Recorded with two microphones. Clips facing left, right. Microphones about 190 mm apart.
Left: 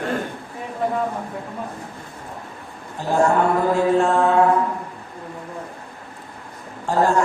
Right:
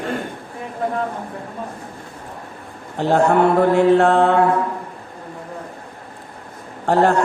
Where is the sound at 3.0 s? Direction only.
65° right (ahead or behind).